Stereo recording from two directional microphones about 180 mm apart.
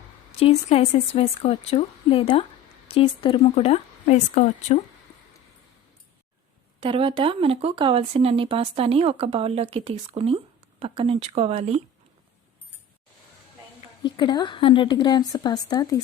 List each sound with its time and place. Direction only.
0.3 s a woman's voice: 35° left (ahead or behind)
6.7 s speech: 30° right (ahead or behind)
14.0 s a woman's voice: 25° left (ahead or behind)